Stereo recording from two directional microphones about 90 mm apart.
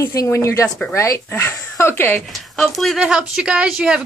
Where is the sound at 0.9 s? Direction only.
35° left (ahead or behind).